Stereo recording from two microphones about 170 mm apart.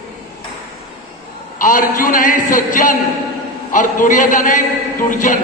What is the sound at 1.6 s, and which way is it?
A man's voice, 50° left (ahead or behind).